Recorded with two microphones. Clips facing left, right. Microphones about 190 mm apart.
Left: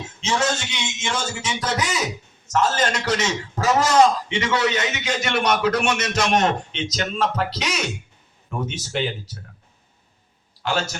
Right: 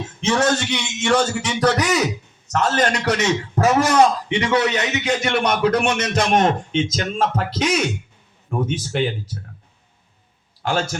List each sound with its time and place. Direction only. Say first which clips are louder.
0.2 s a man's voice: right 5 dB; 60° right (ahead or behind)
10.6 s a man's voice: right 2 dB; 50° right (ahead or behind)